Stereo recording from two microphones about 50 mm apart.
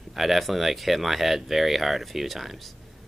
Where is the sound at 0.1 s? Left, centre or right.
Centre.